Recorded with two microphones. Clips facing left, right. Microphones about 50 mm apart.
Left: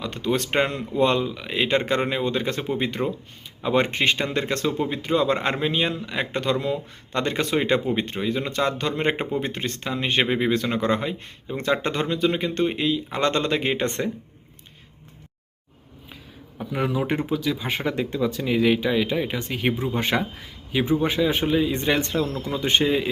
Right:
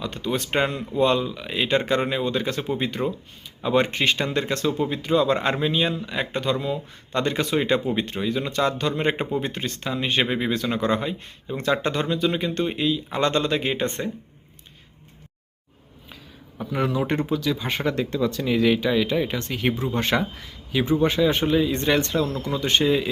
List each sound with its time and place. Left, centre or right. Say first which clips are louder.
0.0 s speech: left 2 dB; left
7.1 s speech: even; left
16.6 s speech: right 1 dB; centre